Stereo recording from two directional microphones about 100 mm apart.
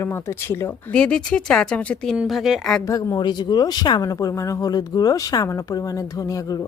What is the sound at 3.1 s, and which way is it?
Speech, 45° left (ahead or behind).